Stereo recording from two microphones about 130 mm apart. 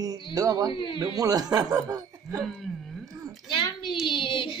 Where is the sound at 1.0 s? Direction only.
25° right (ahead or behind).